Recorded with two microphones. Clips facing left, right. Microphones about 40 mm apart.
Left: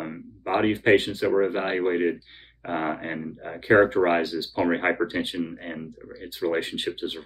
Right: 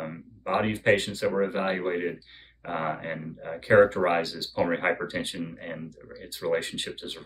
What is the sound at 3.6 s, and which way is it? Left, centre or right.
Speech, left.